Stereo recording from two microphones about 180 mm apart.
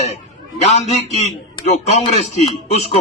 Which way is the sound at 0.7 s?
40° left (ahead or behind).